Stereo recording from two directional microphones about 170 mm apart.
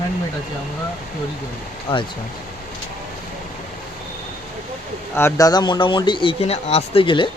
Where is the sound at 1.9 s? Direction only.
30° left (ahead or behind).